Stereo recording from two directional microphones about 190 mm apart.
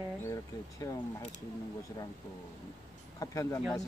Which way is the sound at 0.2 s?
15° left (ahead or behind).